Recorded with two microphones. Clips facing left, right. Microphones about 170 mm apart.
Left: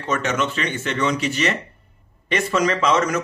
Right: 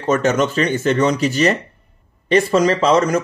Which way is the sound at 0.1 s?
40° right (ahead or behind).